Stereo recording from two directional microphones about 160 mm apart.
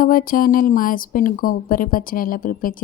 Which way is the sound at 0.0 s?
60° left (ahead or behind).